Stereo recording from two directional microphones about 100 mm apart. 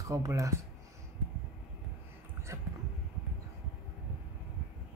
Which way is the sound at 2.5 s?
30° right (ahead or behind).